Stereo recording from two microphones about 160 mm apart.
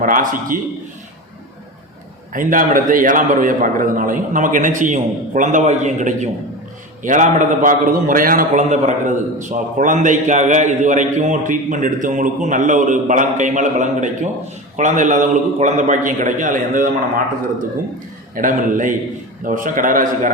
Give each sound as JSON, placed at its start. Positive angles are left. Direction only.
{"t": 0.0, "sound": "a man's voice", "side_deg": -60}
{"t": 2.3, "sound": "a man's voice", "side_deg": -55}
{"t": 18.3, "sound": "a man's voice", "side_deg": -55}